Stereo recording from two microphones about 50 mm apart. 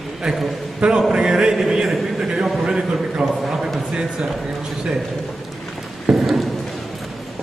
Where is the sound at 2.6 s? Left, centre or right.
Centre.